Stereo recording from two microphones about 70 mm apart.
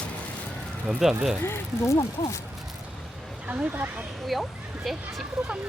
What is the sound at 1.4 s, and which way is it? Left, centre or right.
Speech, left.